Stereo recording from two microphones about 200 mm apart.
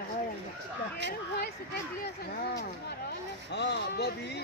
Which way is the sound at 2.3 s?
55° left (ahead or behind).